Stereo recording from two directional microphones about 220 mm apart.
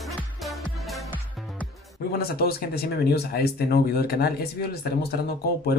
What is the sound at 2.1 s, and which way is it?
Speech, 45° left (ahead or behind).